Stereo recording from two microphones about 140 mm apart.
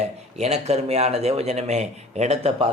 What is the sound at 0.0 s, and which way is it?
Speech, 50° right (ahead or behind).